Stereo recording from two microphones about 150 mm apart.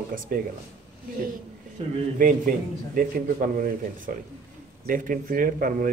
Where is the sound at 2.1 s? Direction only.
70° right (ahead or behind).